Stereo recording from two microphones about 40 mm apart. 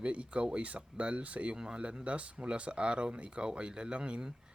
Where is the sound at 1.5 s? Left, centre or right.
Centre.